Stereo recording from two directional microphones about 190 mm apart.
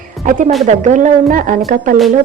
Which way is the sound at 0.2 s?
40° right (ahead or behind).